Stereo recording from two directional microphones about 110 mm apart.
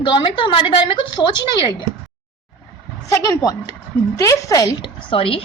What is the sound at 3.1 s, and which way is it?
A woman's voice, 30° left (ahead or behind).